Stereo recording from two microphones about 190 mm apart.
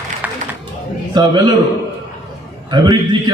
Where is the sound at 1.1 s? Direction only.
20° right (ahead or behind).